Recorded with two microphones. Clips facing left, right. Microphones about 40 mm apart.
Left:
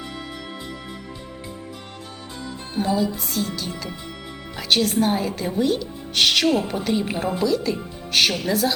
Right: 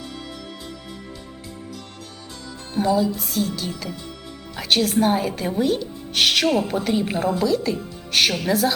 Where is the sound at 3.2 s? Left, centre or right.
Centre.